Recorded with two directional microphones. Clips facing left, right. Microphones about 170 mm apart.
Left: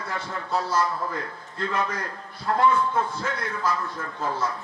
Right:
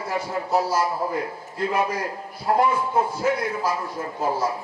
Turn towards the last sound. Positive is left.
turn(degrees=-20)  # may be behind; listen again after turning